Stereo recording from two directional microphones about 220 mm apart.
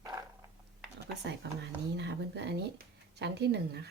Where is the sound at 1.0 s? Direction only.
50° right (ahead or behind).